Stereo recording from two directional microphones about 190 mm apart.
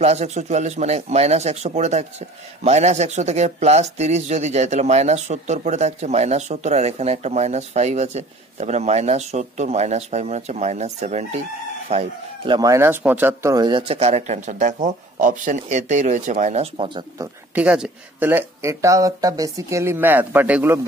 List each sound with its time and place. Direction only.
0.0 s speech: 35° right (ahead or behind)
12.5 s speech: 15° right (ahead or behind)
17.6 s speech: 5° right (ahead or behind)